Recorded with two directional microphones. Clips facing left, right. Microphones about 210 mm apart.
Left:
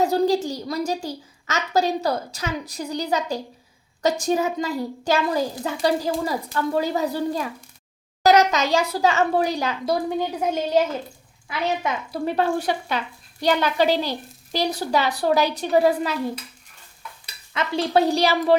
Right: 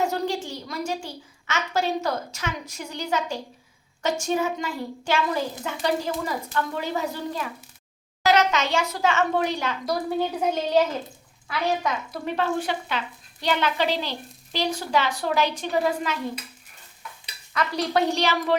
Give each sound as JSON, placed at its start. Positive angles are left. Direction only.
{"t": 0.0, "sound": "a woman's voice", "side_deg": 35}
{"t": 10.2, "sound": "a woman's voice", "side_deg": 10}
{"t": 11.8, "sound": "a woman's voice", "side_deg": 35}
{"t": 17.5, "sound": "a woman's voice", "side_deg": 25}